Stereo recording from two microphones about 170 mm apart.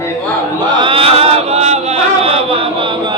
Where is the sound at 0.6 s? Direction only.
30° right (ahead or behind).